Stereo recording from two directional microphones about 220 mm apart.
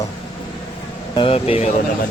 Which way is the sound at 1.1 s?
25° left (ahead or behind).